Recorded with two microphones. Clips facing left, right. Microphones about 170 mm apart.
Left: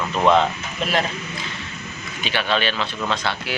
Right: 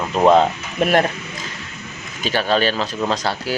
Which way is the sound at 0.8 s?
55° right (ahead or behind).